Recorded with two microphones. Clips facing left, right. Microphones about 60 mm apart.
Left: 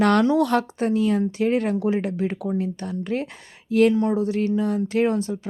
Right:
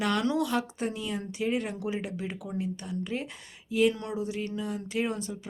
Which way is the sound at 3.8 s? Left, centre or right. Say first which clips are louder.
Left 9 dB; left.